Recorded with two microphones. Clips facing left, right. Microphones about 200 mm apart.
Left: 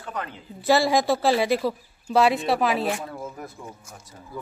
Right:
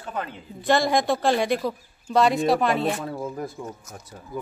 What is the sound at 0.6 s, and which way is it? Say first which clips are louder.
Speech: left 1 dB; 5° left (ahead or behind).